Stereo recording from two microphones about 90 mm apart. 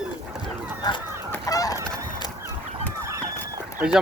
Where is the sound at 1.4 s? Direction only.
40° left (ahead or behind).